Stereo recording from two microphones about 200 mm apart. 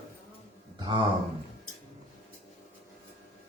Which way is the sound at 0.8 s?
25° right (ahead or behind).